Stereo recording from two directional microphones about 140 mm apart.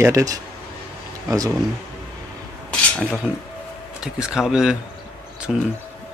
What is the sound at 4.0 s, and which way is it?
Speech, 5° right (ahead or behind).